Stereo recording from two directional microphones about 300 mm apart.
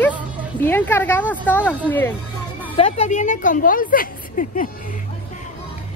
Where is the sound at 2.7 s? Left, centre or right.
Left.